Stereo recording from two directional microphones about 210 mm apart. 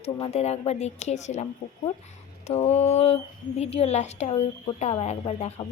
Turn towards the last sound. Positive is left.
turn(degrees=30)  # may be behind; listen again after turning